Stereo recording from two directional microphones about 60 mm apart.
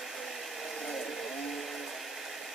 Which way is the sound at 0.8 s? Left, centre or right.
Centre.